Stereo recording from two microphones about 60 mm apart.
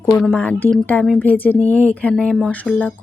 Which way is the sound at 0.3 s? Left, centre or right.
Left.